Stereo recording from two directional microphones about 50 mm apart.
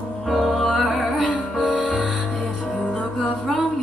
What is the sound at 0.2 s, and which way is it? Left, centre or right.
Music, centre.